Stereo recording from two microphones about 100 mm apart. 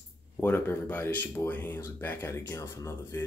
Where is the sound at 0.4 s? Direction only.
20° left (ahead or behind).